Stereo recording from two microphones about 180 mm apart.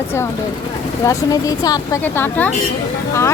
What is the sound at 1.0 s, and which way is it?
Speech, 20° left (ahead or behind).